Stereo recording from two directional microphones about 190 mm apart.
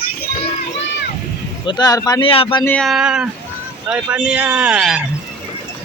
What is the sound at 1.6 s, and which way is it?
Speech, 20° left (ahead or behind).